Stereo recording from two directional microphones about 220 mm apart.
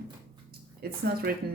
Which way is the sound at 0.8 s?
45° right (ahead or behind).